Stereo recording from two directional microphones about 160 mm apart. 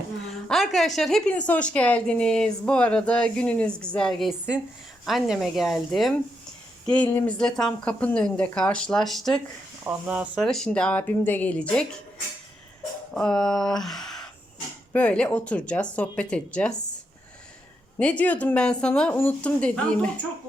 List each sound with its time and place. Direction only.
0.4 s a sound: centre (ahead or behind)
0.9 s speech: centre (ahead or behind)
7.1 s speech: 15° left (ahead or behind)
7.3 s speech: 5° left (ahead or behind)
9.8 s speech: 10° right (ahead or behind)
10.4 s speech: 5° left (ahead or behind)
13.1 s speech: 5° left (ahead or behind)
17.9 s speech: 10° left (ahead or behind)